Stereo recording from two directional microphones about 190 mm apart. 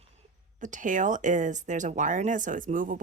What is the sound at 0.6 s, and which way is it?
Speech, 45° right (ahead or behind).